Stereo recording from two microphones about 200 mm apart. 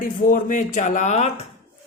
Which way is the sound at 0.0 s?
40° left (ahead or behind).